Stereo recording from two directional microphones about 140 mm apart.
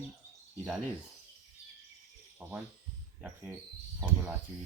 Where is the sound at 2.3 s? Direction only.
10° right (ahead or behind).